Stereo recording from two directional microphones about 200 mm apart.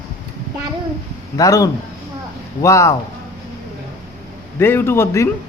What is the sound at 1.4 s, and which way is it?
A man's voice, 15° left (ahead or behind).